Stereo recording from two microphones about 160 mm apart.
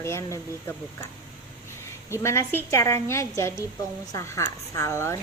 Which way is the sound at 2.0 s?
15° left (ahead or behind).